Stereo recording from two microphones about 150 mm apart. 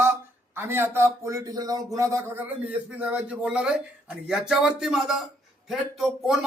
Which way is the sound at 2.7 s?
10° right (ahead or behind).